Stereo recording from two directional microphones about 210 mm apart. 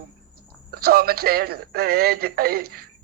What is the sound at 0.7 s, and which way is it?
A woman's voice, 45° right (ahead or behind).